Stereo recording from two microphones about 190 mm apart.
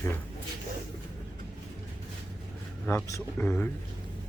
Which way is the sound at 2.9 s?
15° left (ahead or behind).